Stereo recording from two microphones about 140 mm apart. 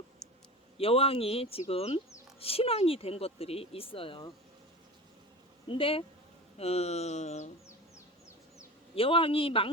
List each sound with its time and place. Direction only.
0.8 s speech: 45° left (ahead or behind)
5.6 s a man's voice: 40° left (ahead or behind)
9.0 s a man's voice: 40° left (ahead or behind)